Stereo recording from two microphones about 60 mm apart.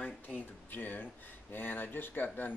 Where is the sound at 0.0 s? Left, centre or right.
Left.